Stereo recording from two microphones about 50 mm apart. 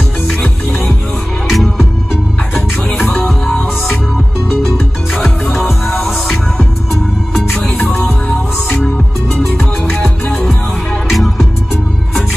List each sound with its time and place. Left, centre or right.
1.5 s music: centre
7.7 s music: left
10.2 s music: left
11.1 s music: centre